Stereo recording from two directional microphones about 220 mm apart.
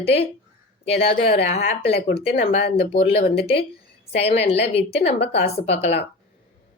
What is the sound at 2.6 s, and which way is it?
Speech, 25° left (ahead or behind).